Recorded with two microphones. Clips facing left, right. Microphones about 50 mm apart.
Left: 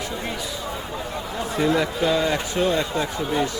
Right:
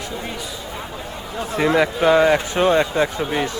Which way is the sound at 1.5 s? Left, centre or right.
Right.